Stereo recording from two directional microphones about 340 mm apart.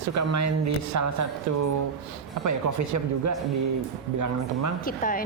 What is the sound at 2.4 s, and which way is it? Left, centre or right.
Speech, right.